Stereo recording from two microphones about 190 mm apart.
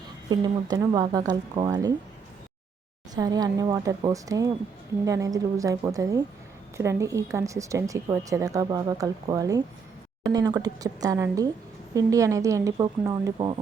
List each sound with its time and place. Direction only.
0.3 s speech: 20° right (ahead or behind)
3.2 s a woman's voice: 20° right (ahead or behind)